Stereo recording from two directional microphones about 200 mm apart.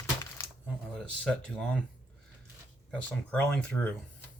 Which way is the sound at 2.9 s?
5° left (ahead or behind).